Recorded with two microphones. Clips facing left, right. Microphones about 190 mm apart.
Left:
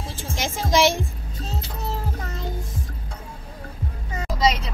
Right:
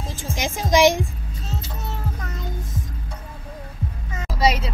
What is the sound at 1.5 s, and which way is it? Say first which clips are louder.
Speech: left 2 dB; 30° left (ahead or behind).